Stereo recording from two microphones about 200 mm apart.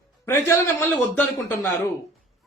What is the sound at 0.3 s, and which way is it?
Speech, 10° left (ahead or behind).